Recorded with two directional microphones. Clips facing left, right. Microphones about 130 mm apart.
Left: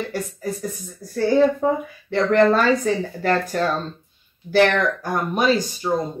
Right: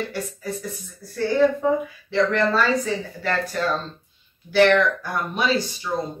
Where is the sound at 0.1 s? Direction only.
45° left (ahead or behind).